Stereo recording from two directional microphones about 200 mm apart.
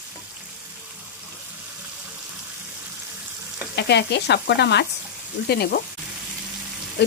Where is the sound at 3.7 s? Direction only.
60° left (ahead or behind).